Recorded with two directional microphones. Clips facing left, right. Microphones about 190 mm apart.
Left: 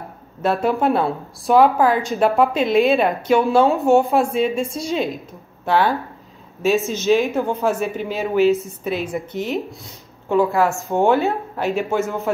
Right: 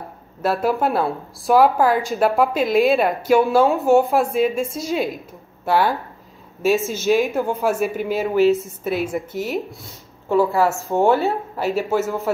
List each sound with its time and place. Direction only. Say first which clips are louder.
0.4 s a woman's voice: left 1 dB; centre (ahead or behind)
6.6 s a woman's voice: even; 10° right (ahead or behind)
11.1 s speech: left 1 dB; 15° left (ahead or behind)
11.5 s a woman's voice: right 1 dB; 5° right (ahead or behind)